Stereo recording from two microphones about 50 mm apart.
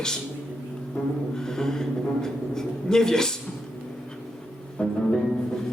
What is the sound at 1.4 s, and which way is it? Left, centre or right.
A man's voice, centre.